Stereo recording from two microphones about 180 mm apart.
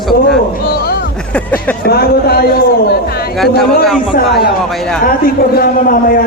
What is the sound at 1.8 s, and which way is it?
Speech, 60° left (ahead or behind).